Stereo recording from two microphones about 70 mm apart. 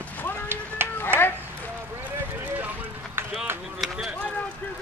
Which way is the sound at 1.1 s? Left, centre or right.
Right.